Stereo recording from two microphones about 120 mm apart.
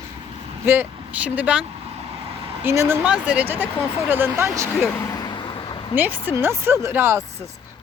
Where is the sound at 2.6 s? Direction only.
20° right (ahead or behind).